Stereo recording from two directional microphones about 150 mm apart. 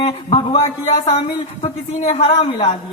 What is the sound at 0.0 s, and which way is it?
Speech, 40° left (ahead or behind).